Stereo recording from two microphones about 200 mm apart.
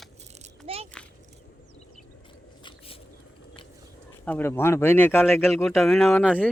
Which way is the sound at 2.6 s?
30° left (ahead or behind).